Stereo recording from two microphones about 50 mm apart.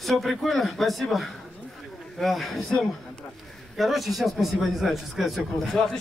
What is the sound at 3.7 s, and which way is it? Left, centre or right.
A man's voice, centre.